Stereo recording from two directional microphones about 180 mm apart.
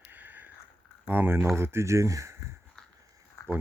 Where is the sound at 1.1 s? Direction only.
10° right (ahead or behind).